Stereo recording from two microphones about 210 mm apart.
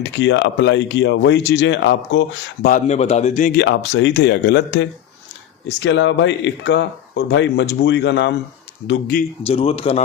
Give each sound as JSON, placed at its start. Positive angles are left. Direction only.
{"t": 0.0, "sound": "speech", "side_deg": 60}
{"t": 2.8, "sound": "a man's voice", "side_deg": 30}
{"t": 3.6, "sound": "speech", "side_deg": 55}
{"t": 9.4, "sound": "a man's voice", "side_deg": 25}